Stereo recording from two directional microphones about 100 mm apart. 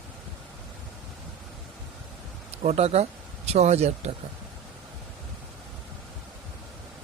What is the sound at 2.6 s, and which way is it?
Speech, 90° right.